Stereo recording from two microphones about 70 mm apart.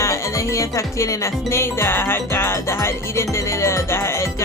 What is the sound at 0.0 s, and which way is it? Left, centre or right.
Music, left.